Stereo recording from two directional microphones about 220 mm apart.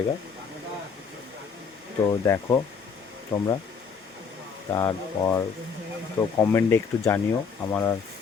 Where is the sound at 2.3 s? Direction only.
10° left (ahead or behind).